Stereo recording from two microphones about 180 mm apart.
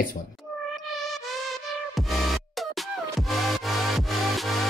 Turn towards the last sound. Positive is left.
turn(degrees=0)  # may be behind; listen again after turning